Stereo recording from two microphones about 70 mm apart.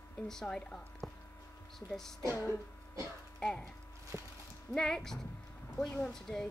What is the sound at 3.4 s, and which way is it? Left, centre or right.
Speech, centre.